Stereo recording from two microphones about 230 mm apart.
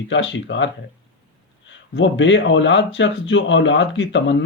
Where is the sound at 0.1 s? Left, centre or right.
Left.